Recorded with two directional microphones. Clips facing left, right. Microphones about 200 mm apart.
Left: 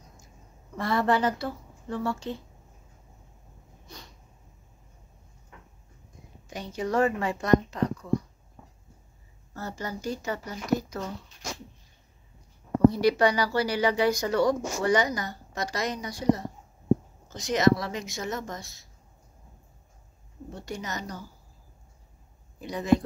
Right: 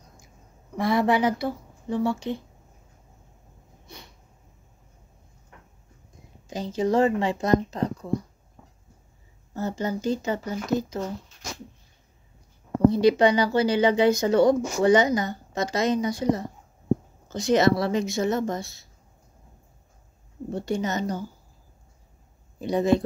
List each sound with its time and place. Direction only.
0.7 s speech: 15° right (ahead or behind)
6.8 s a woman's voice: 25° right (ahead or behind)
9.5 s a woman's voice: 20° right (ahead or behind)
12.9 s a woman's voice: 25° right (ahead or behind)
20.6 s a woman's voice: 25° right (ahead or behind)
22.6 s a woman's voice: 25° right (ahead or behind)